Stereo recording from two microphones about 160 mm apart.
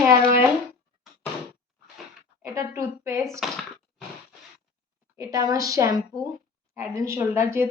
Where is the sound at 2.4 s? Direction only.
20° right (ahead or behind).